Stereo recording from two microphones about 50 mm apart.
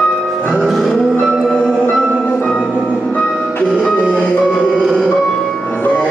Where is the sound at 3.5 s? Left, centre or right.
Left.